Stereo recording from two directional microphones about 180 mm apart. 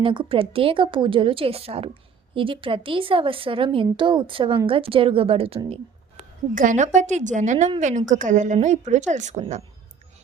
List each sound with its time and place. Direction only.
0.0 s a woman's voice: 30° right (ahead or behind)
6.5 s a woman's voice: 45° right (ahead or behind)